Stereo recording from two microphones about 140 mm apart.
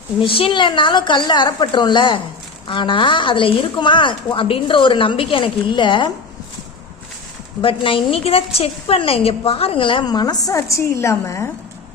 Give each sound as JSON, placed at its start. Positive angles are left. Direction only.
{"t": 0.2, "sound": "a woman's voice", "side_deg": 40}
{"t": 7.6, "sound": "a woman's voice", "side_deg": 40}